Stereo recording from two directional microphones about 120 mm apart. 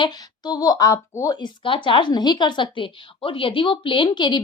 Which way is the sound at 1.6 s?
45° left (ahead or behind).